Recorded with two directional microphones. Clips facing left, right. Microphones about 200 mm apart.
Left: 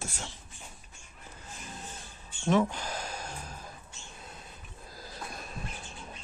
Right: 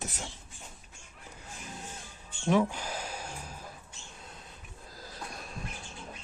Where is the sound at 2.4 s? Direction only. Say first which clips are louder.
Even; 10° right (ahead or behind).